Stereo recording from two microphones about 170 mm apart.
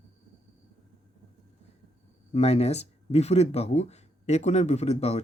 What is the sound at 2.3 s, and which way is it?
Speech, 40° left (ahead or behind).